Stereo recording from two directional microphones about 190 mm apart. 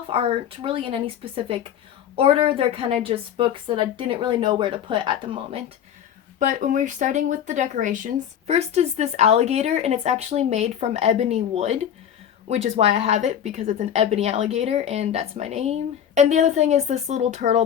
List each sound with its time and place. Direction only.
0.1 s a woman's voice: 30° right (ahead or behind)
6.4 s speech: 45° right (ahead or behind)